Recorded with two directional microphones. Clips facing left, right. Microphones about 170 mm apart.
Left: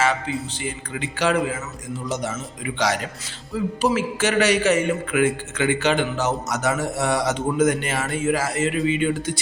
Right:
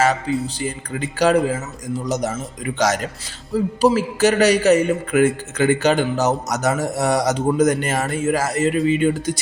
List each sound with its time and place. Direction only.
0.6 s a man's voice: 40° right (ahead or behind)